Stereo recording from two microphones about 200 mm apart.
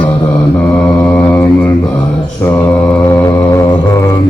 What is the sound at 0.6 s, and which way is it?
Mantra, 10° left (ahead or behind).